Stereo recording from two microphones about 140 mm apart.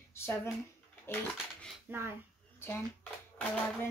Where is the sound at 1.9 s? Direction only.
15° right (ahead or behind).